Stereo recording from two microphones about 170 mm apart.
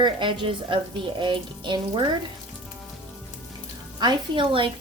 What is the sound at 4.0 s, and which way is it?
Speech, 25° right (ahead or behind).